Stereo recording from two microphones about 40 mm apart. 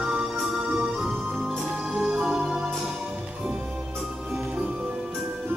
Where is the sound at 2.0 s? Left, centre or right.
Right.